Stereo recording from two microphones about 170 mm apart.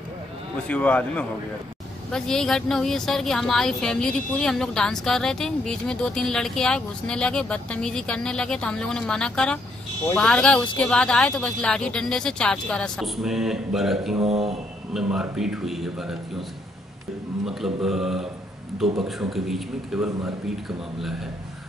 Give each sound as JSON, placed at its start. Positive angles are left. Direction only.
{"t": 0.7, "sound": "speech", "side_deg": 10}
{"t": 14.2, "sound": "speech", "side_deg": -35}
{"t": 15.0, "sound": "speech", "side_deg": -5}
{"t": 17.5, "sound": "speech", "side_deg": 0}